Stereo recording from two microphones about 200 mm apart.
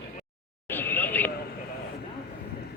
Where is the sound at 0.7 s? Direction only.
10° left (ahead or behind).